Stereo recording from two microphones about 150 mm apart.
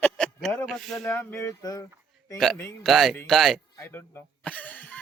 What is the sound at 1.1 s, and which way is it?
Speech, 15° left (ahead or behind).